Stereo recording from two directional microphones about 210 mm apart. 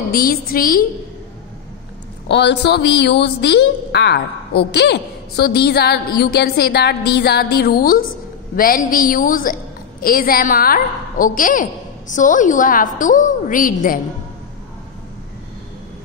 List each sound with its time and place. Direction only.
0.1 s a woman's voice: 45° left (ahead or behind)
2.2 s a woman's voice: 55° left (ahead or behind)